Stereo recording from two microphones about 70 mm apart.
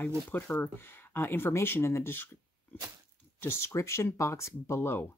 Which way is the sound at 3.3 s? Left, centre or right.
Left.